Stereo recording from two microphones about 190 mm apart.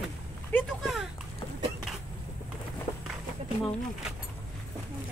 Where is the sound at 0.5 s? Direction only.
Centre (ahead or behind).